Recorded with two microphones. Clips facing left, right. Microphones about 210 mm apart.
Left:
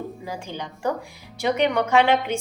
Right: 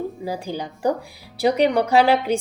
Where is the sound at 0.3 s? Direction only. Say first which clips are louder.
Right 5 dB; 35° right (ahead or behind).